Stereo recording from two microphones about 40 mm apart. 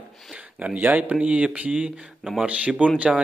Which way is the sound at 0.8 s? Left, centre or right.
Right.